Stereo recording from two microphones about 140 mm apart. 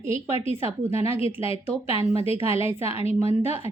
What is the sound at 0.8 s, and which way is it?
Speech, 20° right (ahead or behind).